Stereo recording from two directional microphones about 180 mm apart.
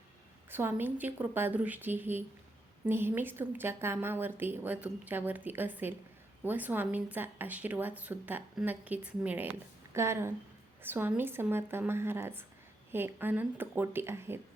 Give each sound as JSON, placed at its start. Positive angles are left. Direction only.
{"t": 0.5, "sound": "a woman's voice", "side_deg": -10}